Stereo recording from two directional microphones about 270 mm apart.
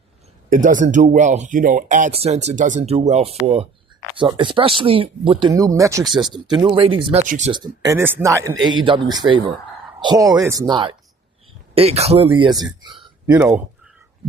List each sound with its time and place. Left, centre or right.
0.5 s speech: right; by 6.1 s centre
6.1 s speech: centre
6.3 s speech: centre